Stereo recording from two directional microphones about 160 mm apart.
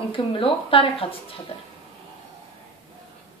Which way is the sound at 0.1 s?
35° left (ahead or behind).